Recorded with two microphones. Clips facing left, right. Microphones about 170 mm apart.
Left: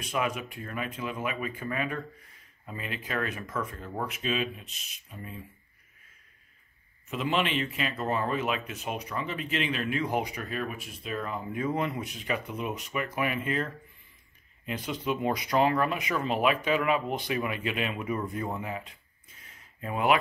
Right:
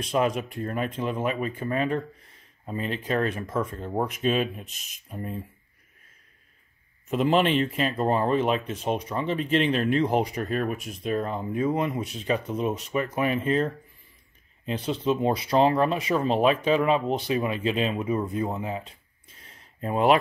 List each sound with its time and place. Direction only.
0.0 s speech: 35° right (ahead or behind)
7.1 s speech: 40° right (ahead or behind)
14.7 s speech: 30° right (ahead or behind)
19.4 s a sound: 35° right (ahead or behind)